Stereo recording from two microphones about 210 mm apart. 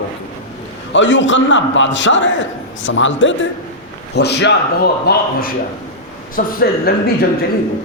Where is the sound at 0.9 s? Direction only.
60° left (ahead or behind); by 6.5 s 40° left (ahead or behind).